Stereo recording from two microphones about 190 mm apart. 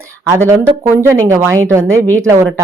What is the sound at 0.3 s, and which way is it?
A woman's voice, 15° right (ahead or behind).